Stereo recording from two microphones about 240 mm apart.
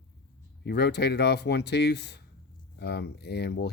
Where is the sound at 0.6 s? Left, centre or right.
Left.